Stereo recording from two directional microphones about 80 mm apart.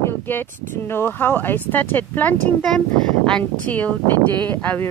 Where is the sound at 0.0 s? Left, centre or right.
Left.